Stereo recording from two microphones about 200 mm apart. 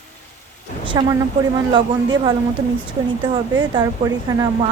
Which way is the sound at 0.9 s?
20° right (ahead or behind).